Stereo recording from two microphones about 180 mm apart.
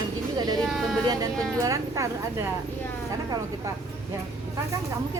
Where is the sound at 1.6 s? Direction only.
20° right (ahead or behind).